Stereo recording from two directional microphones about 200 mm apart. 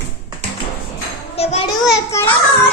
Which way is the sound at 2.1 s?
15° left (ahead or behind).